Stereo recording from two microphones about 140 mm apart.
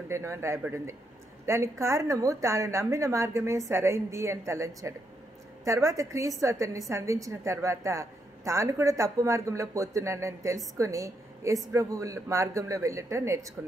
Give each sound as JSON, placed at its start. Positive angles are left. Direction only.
{"t": 0.1, "sound": "a woman's voice", "side_deg": -20}